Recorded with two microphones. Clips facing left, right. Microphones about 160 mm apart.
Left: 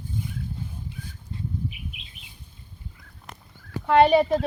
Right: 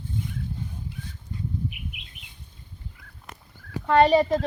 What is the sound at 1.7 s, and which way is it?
Bird flight, 60° right (ahead or behind).